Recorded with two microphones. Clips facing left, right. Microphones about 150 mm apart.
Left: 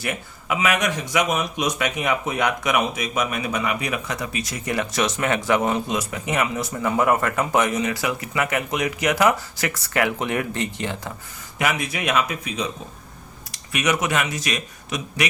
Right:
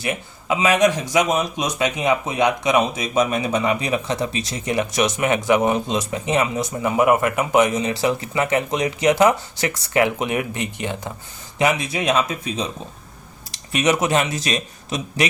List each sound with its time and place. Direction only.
0.0 s speech: 25° right (ahead or behind)
13.7 s a man's voice: 30° right (ahead or behind)